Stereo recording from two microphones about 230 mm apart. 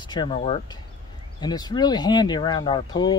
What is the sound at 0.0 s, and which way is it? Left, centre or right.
Speech, centre.